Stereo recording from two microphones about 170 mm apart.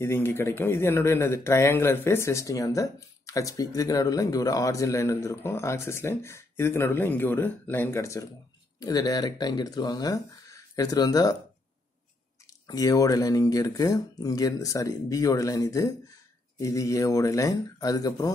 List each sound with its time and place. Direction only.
0.0 s speech: 15° left (ahead or behind)
12.6 s speech: 20° left (ahead or behind)